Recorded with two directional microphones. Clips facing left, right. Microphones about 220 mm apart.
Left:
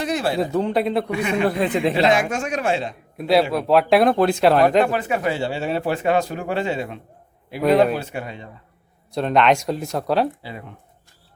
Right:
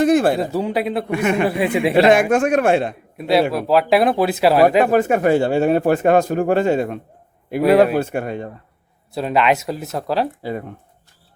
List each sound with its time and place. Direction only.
0.0 s speech: 50° right (ahead or behind)
0.5 s speech: 5° right (ahead or behind)
1.1 s speech: 55° right (ahead or behind)
1.5 s speech: 10° right (ahead or behind)
2.0 s speech: 55° right (ahead or behind)
3.2 s speech: centre (ahead or behind)
4.8 s a man's voice: 45° right (ahead or behind)
9.1 s speech: 5° right (ahead or behind)
10.4 s a man's voice: 45° right (ahead or behind)